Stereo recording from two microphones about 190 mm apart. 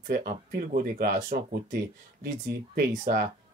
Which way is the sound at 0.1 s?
50° right (ahead or behind).